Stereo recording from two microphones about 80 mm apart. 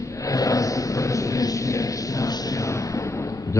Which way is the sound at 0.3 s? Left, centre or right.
Left.